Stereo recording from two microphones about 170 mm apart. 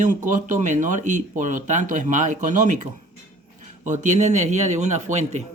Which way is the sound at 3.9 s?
45° right (ahead or behind).